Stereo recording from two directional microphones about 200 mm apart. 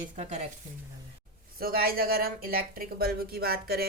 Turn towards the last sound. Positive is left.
turn(degrees=-50)  # may be behind; listen again after turning